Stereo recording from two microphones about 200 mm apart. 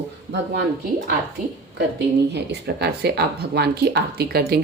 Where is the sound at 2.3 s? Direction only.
55° right (ahead or behind).